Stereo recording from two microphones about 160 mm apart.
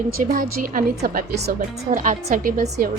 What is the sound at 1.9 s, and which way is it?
Speech, 50° right (ahead or behind).